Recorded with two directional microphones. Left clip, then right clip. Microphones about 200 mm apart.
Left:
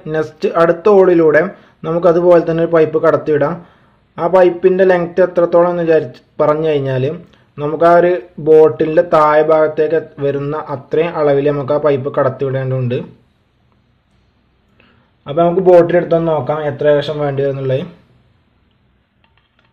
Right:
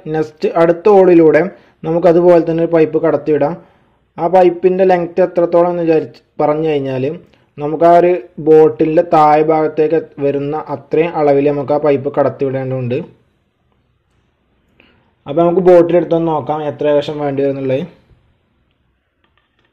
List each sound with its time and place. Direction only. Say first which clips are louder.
0.0 s a man's voice: even; 15° right (ahead or behind)
14.8 s a man's voice: right 1 dB; 15° right (ahead or behind)